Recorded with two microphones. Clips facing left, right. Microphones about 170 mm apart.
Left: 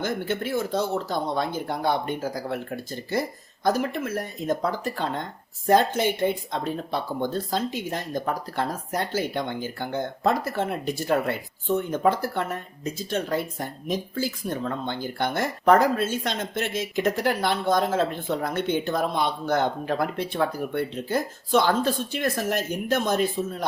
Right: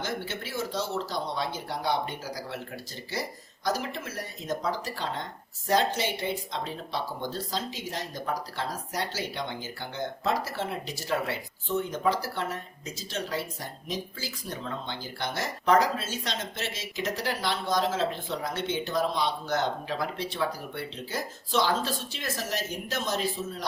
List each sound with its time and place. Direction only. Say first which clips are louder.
0.0 s speech: left 7 dB; 55° left (ahead or behind)